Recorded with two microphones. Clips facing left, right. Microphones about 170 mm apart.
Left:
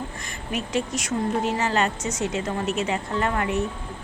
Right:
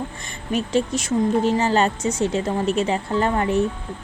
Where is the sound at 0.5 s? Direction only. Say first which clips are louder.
Right 5 dB; 30° right (ahead or behind).